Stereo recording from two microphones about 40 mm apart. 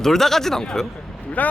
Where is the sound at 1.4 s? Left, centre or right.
Left.